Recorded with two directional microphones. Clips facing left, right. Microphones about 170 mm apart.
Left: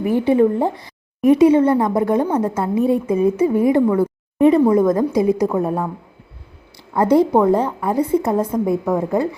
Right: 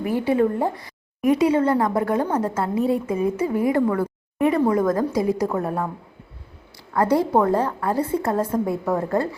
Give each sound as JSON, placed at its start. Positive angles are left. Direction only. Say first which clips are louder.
{"t": 0.0, "sound": "a woman's voice", "louder": "left 5 dB", "side_deg": 20}
{"t": 3.9, "sound": "a sound", "louder": "left 6 dB", "side_deg": 25}
{"t": 4.7, "sound": "a woman's voice", "louder": "left 5 dB", "side_deg": 20}
{"t": 6.9, "sound": "a woman's voice", "louder": "left 5 dB", "side_deg": 20}